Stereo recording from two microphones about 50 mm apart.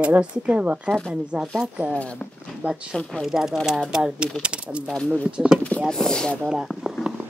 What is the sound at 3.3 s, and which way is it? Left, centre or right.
Speech, centre.